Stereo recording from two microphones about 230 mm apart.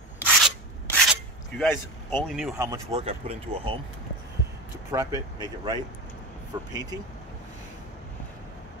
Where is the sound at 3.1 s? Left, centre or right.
Right.